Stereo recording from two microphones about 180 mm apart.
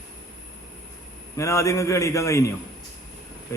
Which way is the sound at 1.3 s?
15° left (ahead or behind).